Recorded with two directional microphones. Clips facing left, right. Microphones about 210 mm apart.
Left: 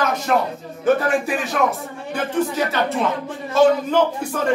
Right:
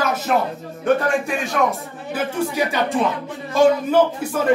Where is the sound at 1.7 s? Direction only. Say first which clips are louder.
Even; 10° right (ahead or behind).